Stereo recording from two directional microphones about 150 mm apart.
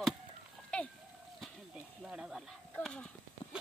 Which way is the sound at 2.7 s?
5° left (ahead or behind).